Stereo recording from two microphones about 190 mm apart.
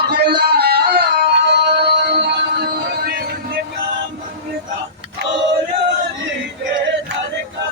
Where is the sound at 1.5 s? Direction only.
60° right (ahead or behind).